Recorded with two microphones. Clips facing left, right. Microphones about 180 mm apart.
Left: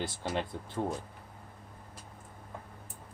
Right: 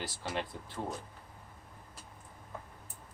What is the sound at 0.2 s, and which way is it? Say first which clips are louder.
Speech: left 2 dB; 20° left (ahead or behind).